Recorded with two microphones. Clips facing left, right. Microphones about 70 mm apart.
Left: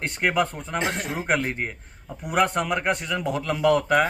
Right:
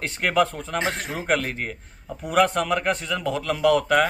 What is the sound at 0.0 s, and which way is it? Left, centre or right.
Speech, centre.